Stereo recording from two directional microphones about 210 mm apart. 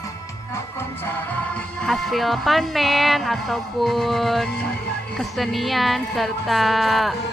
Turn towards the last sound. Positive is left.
turn(degrees=0)  # may be behind; listen again after turning